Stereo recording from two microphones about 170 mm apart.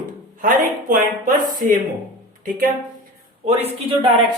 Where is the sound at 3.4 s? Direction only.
35° right (ahead or behind).